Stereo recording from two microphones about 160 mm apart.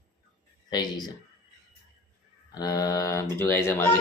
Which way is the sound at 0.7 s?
25° left (ahead or behind).